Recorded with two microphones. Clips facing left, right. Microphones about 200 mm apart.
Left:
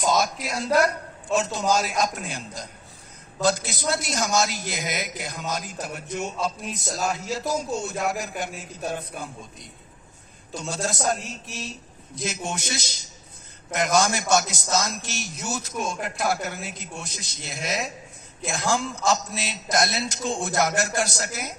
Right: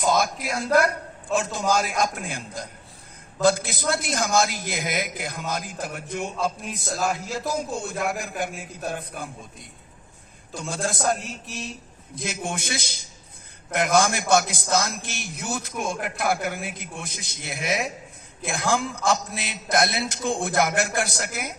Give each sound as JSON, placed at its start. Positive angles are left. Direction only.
{"t": 0.0, "sound": "a man's voice", "side_deg": -55}
{"t": 10.6, "sound": "a man's voice", "side_deg": -55}
{"t": 12.1, "sound": "a man's voice", "side_deg": -55}